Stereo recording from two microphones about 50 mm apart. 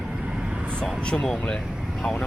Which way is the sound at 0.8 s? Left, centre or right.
Centre.